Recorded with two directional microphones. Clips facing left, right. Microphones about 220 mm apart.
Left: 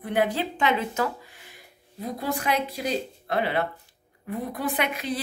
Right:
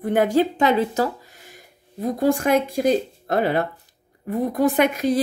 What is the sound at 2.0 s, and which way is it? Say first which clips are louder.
Speech: right 10 dB; 45° right (ahead or behind).